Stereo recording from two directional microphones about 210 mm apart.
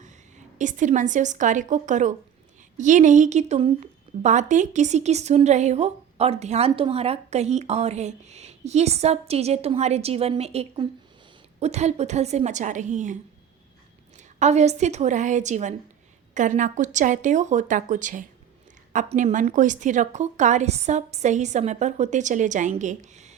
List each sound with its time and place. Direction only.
0.0 s a woman's voice: 35° right (ahead or behind)
14.3 s a woman's voice: 35° right (ahead or behind)